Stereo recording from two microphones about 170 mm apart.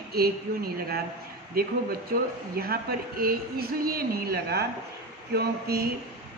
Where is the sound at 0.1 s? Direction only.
65° right (ahead or behind).